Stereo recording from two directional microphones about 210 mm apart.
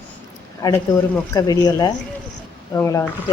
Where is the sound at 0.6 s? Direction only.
15° left (ahead or behind).